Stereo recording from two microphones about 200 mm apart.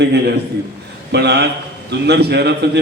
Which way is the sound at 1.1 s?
55° right (ahead or behind).